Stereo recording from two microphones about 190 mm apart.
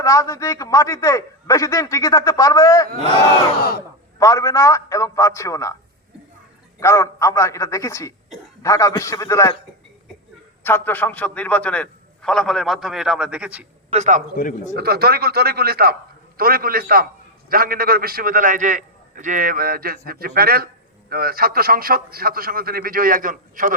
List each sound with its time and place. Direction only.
0.0 s a man's voice: 15° left (ahead or behind)
4.2 s a man's voice: 15° left (ahead or behind)
6.7 s a man's voice: 15° left (ahead or behind)
10.6 s a man's voice: 10° left (ahead or behind); by 13.7 s 5° right (ahead or behind)
13.9 s a man's voice: 40° right (ahead or behind)
14.3 s speech: 40° left (ahead or behind)
14.8 s a man's voice: 55° right (ahead or behind)